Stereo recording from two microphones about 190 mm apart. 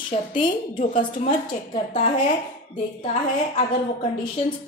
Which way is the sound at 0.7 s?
45° left (ahead or behind).